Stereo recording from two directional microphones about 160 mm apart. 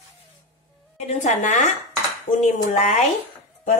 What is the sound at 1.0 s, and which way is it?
Speech, 45° left (ahead or behind).